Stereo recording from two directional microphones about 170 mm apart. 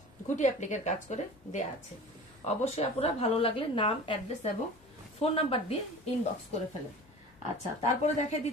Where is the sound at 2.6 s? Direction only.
35° left (ahead or behind).